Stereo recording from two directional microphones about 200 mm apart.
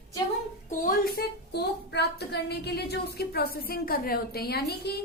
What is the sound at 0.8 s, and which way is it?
Speech, 45° left (ahead or behind).